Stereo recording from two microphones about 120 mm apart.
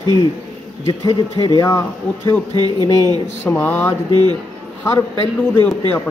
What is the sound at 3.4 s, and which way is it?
Speech, 15° left (ahead or behind).